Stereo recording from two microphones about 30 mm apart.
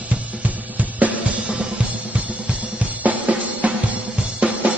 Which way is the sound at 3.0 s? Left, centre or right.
Right.